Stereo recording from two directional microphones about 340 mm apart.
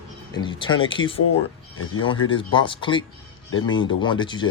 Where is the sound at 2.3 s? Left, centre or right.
Centre.